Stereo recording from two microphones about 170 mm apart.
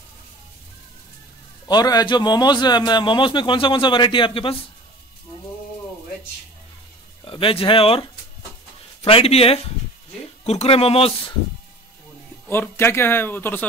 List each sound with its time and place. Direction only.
1.7 s a man's voice: 25° left (ahead or behind)
7.2 s a man's voice: 30° left (ahead or behind)
12.4 s speech: 15° left (ahead or behind)